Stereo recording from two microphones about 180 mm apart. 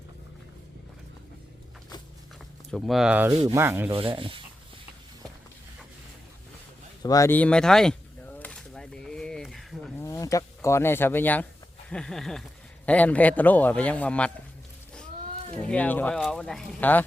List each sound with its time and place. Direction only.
2.7 s speech: centre (ahead or behind)
3.4 s sanding: 15° right (ahead or behind)
3.9 s speech: 30° right (ahead or behind)
7.0 s a sound: 20° left (ahead or behind); by 9.9 s centre (ahead or behind)
10.0 s a man's voice: 20° left (ahead or behind)
15.6 s a man's voice: 10° left (ahead or behind)